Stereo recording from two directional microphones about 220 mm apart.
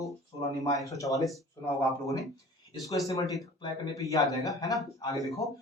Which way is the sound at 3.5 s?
15° left (ahead or behind).